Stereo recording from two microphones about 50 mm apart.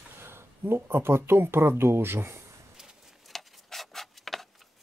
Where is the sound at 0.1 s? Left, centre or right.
Right.